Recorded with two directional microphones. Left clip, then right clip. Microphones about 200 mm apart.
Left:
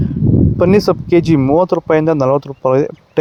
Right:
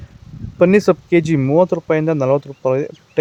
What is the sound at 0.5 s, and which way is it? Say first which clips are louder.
Speech: right 1 dB; 20° left (ahead or behind).